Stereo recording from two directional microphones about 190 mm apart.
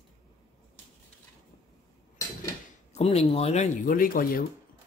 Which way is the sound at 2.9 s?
35° left (ahead or behind).